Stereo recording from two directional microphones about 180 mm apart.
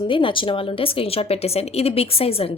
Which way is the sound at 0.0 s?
30° left (ahead or behind).